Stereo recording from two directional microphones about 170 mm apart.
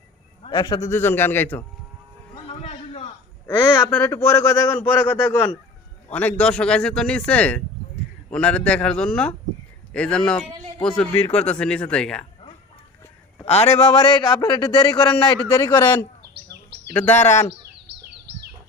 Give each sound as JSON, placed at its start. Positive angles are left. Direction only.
{"t": 0.4, "sound": "speech", "side_deg": 25}
{"t": 2.5, "sound": "a sound", "side_deg": 35}
{"t": 3.4, "sound": "speech", "side_deg": 10}
{"t": 4.8, "sound": "a man's voice", "side_deg": 10}
{"t": 13.4, "sound": "a man's voice", "side_deg": 40}
{"t": 15.5, "sound": "speech", "side_deg": 15}
{"t": 17.8, "sound": "bird", "side_deg": -75}